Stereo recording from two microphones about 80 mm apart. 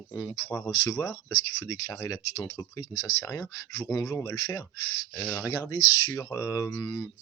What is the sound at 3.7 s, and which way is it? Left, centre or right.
Speech, left.